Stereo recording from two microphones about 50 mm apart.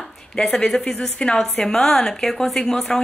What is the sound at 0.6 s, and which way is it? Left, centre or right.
A woman's voice, centre.